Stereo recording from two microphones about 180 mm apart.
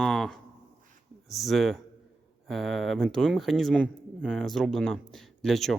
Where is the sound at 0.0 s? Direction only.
Centre (ahead or behind).